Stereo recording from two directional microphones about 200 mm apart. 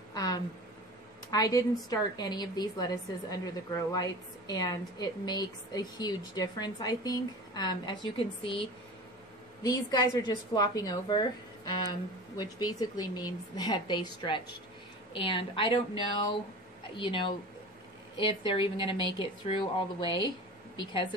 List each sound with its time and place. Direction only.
0.1 s a sound: 20° left (ahead or behind)
1.3 s a woman's voice: 20° left (ahead or behind)
9.6 s a woman's voice: 20° left (ahead or behind)